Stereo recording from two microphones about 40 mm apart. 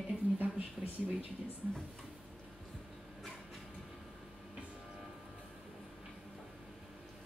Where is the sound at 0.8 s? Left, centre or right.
Centre.